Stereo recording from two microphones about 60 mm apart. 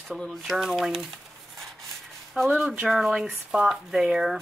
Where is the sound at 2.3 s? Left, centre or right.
Centre.